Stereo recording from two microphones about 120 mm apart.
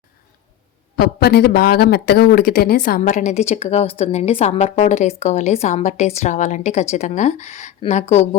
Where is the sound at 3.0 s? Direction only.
90° left.